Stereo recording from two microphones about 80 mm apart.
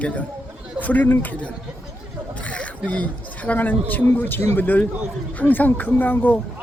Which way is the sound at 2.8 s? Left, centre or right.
Centre.